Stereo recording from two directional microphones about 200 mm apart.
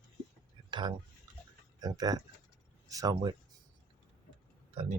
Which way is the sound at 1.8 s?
20° right (ahead or behind).